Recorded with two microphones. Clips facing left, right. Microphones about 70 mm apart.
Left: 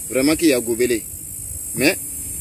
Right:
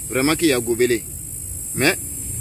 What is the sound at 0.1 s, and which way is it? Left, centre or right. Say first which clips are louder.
Speech: left 2 dB; right.